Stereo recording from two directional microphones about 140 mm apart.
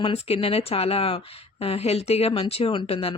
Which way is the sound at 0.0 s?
45° left (ahead or behind).